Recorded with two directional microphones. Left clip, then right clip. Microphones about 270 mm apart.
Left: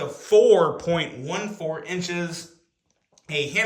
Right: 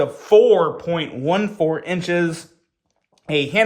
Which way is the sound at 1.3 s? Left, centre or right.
Right.